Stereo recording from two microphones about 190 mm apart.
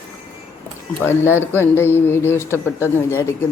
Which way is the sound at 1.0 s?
10° left (ahead or behind).